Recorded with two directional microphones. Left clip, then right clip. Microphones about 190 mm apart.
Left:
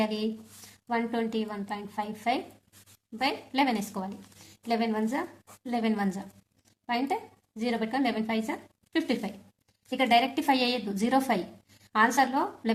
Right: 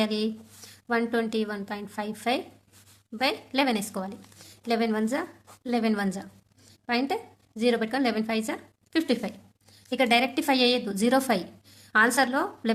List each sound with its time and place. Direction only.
0.0 s a woman's voice: 25° right (ahead or behind)